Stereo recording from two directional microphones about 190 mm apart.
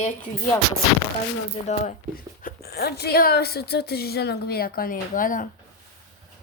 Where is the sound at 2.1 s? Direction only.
50° left (ahead or behind).